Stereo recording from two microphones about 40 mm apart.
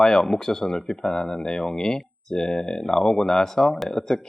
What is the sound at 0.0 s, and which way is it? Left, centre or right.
Speech, centre.